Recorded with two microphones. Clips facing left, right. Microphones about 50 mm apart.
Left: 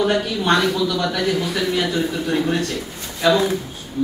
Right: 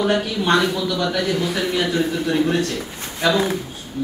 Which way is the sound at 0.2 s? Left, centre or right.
Centre.